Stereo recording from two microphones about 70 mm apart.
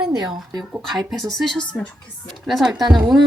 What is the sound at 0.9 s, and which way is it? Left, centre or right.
Speech, centre.